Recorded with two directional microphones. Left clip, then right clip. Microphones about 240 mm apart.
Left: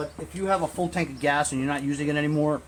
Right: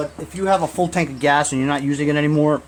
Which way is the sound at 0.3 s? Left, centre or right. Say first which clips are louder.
Right 7 dB; right.